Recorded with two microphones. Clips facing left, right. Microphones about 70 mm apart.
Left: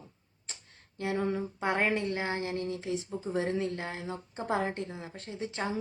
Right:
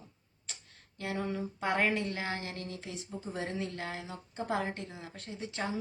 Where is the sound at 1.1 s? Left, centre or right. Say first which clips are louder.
Left 4 dB; left.